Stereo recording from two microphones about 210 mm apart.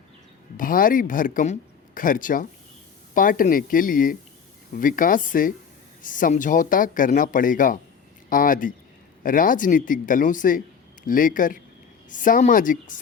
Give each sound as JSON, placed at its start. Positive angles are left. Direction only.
{"t": 0.5, "sound": "speech", "side_deg": 40}